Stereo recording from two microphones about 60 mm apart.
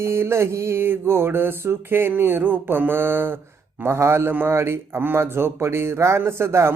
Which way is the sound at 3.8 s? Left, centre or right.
Right.